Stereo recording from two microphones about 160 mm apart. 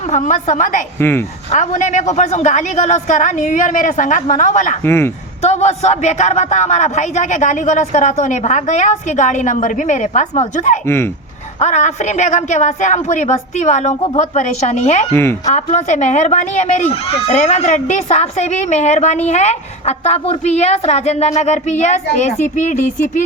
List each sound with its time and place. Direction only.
0.1 s speech: 50° left (ahead or behind)
0.9 s speech: 15° left (ahead or behind)
1.5 s speech: 50° left (ahead or behind)
4.8 s speech: 15° left (ahead or behind)
5.5 s speech: 45° left (ahead or behind)
10.8 s speech: 15° left (ahead or behind)
11.6 s speech: 45° left (ahead or behind)
15.1 s speech: 15° left (ahead or behind)
15.4 s speech: 50° left (ahead or behind)